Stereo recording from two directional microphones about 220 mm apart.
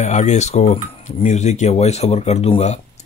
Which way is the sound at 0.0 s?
30° left (ahead or behind).